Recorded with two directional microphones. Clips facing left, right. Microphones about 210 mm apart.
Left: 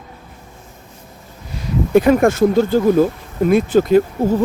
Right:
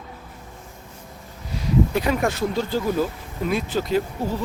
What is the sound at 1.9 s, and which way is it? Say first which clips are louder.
Speech: left 10 dB; 50° left (ahead or behind).